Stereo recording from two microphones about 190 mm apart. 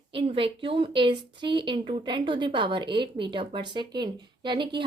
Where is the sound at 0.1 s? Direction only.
25° right (ahead or behind).